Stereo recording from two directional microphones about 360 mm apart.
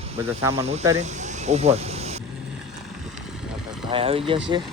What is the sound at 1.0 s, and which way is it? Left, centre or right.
Vehicle, centre.